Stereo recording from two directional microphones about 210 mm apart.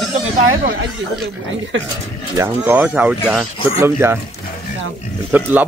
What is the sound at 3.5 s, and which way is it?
Speech, 25° left (ahead or behind).